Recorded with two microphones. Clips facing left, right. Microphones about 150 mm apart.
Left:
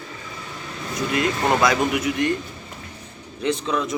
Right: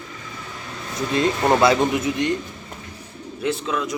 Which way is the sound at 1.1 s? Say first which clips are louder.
Right 3 dB; 30° right (ahead or behind).